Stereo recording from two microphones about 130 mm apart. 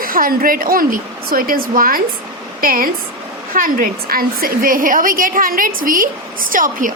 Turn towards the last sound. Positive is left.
turn(degrees=-90)